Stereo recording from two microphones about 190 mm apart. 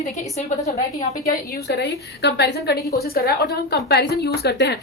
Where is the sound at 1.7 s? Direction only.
60° left (ahead or behind).